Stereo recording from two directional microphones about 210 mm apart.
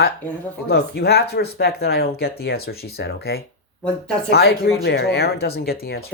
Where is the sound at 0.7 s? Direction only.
50° left (ahead or behind).